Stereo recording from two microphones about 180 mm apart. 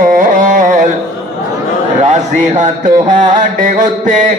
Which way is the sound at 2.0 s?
40° right (ahead or behind).